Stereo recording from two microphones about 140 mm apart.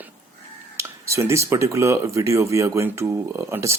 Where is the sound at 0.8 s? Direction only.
20° right (ahead or behind).